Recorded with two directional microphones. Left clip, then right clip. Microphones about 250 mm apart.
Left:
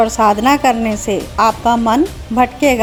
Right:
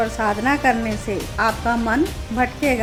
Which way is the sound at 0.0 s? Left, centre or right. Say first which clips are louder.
Left 9 dB; left.